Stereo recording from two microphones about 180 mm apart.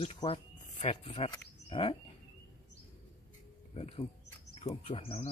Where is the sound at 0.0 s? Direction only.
35° left (ahead or behind).